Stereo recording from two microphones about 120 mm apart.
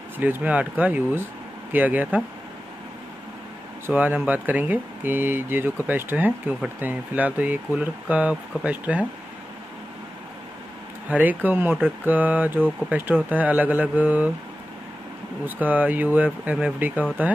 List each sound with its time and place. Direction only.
0.2 s speech: 15° right (ahead or behind)
3.8 s speech: 15° right (ahead or behind)
11.1 s speech: 15° right (ahead or behind)
15.4 s speech: 15° right (ahead or behind)